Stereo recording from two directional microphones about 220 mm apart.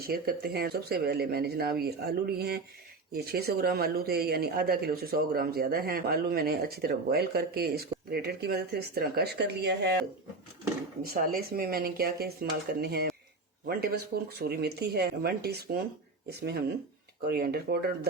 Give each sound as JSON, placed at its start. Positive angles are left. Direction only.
{"t": 0.1, "sound": "speech", "side_deg": -45}
{"t": 11.0, "sound": "speech", "side_deg": -40}